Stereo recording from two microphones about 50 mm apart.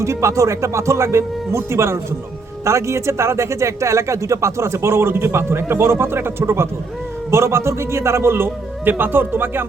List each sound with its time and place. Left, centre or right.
0.0 s speech: right
2.6 s a man's voice: right